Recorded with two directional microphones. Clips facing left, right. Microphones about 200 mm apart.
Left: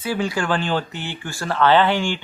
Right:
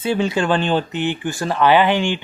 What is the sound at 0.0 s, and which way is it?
Speech, 25° right (ahead or behind).